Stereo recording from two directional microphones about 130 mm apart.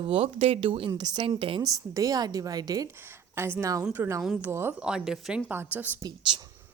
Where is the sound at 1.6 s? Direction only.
25° right (ahead or behind).